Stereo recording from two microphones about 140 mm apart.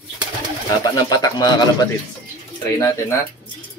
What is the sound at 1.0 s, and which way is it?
Speech, 25° left (ahead or behind).